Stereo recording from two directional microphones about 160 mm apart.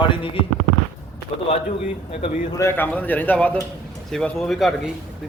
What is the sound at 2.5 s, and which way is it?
A man's voice, 15° left (ahead or behind).